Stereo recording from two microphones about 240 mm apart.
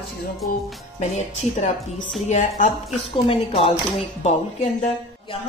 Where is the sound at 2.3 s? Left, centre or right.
Left.